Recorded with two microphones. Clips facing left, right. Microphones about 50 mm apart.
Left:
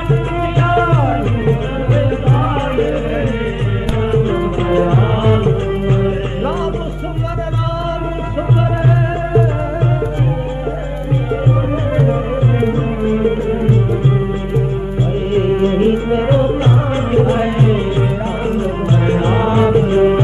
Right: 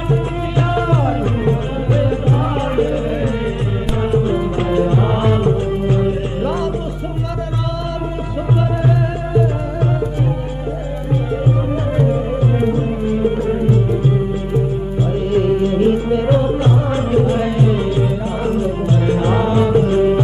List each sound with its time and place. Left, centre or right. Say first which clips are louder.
0.1 s music: left 2 dB; left
4.1 s music: left 1 dB; left
8.8 s music: left 2 dB; left
12.0 s music: even; left
15.3 s music: left 1 dB; left
19.0 s music: left 1 dB; left